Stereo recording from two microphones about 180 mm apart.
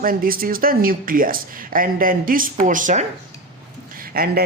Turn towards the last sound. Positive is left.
turn(degrees=-60)  # may be behind; listen again after turning